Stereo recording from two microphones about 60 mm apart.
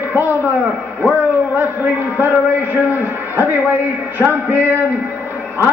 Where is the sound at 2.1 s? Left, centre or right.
Right.